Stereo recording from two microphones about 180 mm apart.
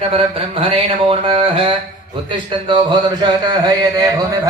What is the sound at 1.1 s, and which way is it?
Speech, 30° right (ahead or behind).